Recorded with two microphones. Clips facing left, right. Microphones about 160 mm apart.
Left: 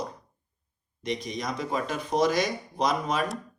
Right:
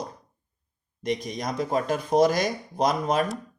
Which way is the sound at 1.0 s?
50° right (ahead or behind).